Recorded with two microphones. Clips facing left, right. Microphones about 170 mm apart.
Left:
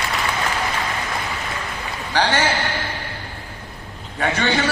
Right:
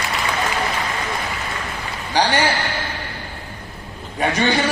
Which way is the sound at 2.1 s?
15° right (ahead or behind).